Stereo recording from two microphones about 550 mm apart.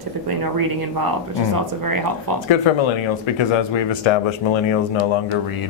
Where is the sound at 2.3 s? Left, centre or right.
Right.